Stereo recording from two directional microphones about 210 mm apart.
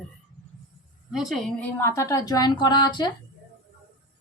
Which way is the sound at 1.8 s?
15° left (ahead or behind).